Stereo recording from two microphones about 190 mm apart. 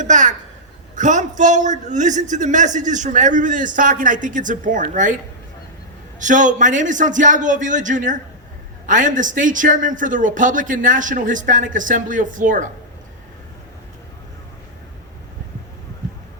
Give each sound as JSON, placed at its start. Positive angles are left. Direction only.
{"t": 0.0, "sound": "a man's voice", "side_deg": -40}
{"t": 6.1, "sound": "a man's voice", "side_deg": -40}